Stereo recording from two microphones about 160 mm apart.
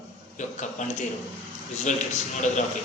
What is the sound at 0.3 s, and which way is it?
Speech, 50° left (ahead or behind).